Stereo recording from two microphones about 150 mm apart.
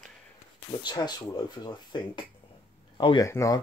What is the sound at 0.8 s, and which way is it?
Speech, 25° left (ahead or behind).